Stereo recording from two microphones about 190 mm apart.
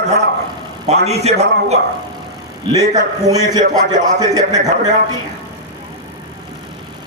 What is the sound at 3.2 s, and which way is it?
A man's voice, 20° right (ahead or behind).